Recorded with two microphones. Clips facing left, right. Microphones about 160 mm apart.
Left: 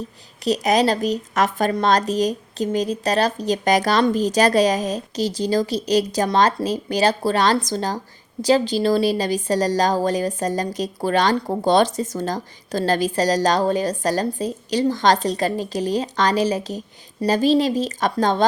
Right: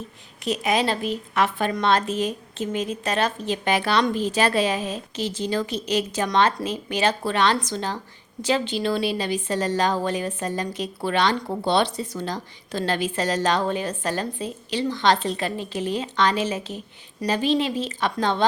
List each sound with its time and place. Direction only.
0.4 s a woman's voice: 40° left (ahead or behind)